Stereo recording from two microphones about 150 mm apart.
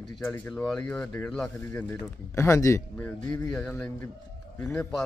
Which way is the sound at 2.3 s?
20° left (ahead or behind).